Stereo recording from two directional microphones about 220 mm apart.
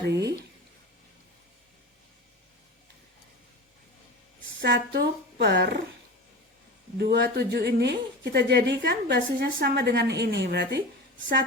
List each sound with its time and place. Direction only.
0.1 s a sound: 50° right (ahead or behind)
4.6 s speech: 45° right (ahead or behind)
7.0 s speech: 45° right (ahead or behind)